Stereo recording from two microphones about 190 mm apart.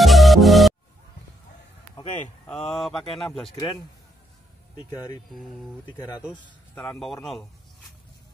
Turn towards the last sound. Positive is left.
turn(degrees=0)  # may be behind; listen again after turning